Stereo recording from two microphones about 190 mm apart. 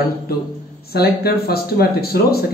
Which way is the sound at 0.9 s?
55° left (ahead or behind).